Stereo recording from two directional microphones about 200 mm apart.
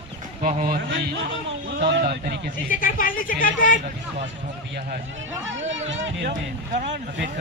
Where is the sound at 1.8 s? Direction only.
55° right (ahead or behind).